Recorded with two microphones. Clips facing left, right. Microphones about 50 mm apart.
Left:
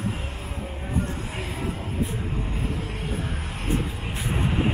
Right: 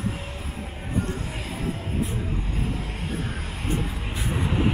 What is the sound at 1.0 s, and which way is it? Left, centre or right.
Music, left.